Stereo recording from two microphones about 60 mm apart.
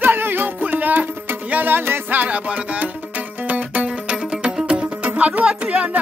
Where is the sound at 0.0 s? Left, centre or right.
Right.